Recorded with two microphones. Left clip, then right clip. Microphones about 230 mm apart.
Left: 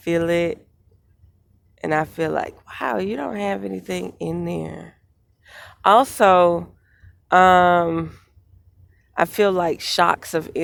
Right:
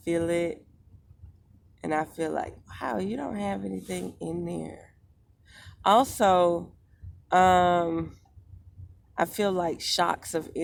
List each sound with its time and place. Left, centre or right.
0.0 s speech: left
1.7 s speech: left